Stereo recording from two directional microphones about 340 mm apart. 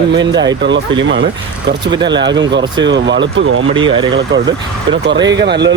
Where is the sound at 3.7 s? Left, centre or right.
Centre.